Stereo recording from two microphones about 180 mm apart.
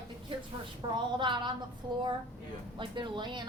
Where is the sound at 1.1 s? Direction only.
25° right (ahead or behind).